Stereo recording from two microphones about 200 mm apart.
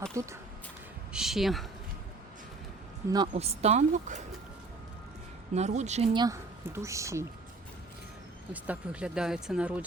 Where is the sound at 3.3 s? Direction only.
30° right (ahead or behind).